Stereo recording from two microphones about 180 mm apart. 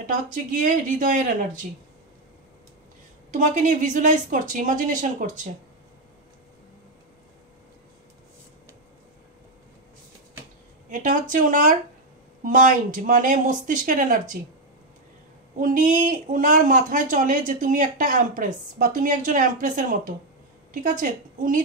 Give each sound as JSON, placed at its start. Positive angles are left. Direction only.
{"t": 0.0, "sound": "speech", "side_deg": -45}
{"t": 3.3, "sound": "speech", "side_deg": -45}
{"t": 10.9, "sound": "speech", "side_deg": -45}
{"t": 15.6, "sound": "speech", "side_deg": -45}